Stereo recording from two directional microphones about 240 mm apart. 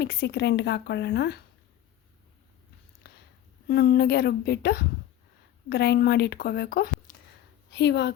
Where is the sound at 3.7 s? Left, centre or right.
Left.